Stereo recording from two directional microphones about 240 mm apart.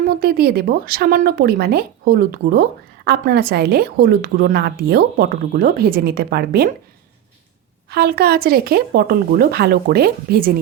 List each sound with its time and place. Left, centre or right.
0.1 s speech: right
7.9 s speech: right